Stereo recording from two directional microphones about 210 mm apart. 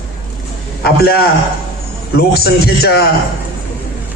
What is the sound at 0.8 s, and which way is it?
A man's voice, 45° left (ahead or behind).